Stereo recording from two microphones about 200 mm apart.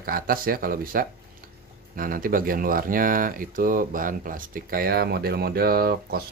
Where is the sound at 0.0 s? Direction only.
45° right (ahead or behind).